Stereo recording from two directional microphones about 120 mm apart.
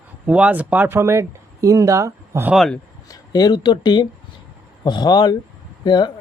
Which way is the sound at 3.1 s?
35° left (ahead or behind).